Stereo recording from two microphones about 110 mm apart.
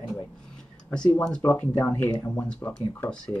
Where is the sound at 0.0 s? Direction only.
30° left (ahead or behind).